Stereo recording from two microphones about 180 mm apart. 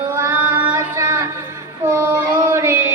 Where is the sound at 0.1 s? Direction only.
15° right (ahead or behind).